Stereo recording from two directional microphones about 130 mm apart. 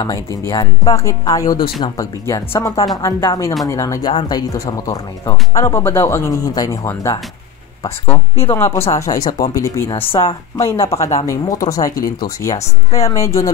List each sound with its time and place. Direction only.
0.5 s speech: 30° left (ahead or behind)
4.1 s speech: 40° left (ahead or behind)
4.4 s speech: 30° left (ahead or behind)
9.9 s speech: 45° left (ahead or behind)
11.2 s speech: 25° left (ahead or behind)